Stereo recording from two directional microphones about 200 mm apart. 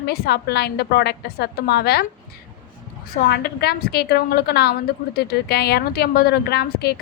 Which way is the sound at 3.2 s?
50° left (ahead or behind).